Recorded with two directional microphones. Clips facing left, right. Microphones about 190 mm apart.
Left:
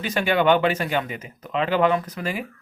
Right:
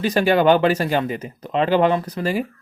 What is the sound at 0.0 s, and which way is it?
Speech, 40° right (ahead or behind).